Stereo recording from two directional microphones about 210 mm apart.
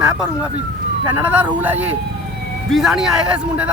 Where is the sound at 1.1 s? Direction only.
5° right (ahead or behind).